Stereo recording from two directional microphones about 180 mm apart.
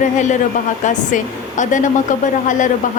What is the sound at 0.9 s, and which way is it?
Speech, 45° left (ahead or behind).